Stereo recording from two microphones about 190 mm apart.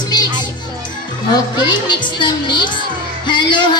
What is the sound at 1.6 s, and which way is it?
Speech, 25° left (ahead or behind).